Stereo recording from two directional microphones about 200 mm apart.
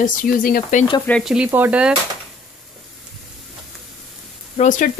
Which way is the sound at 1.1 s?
Centre (ahead or behind).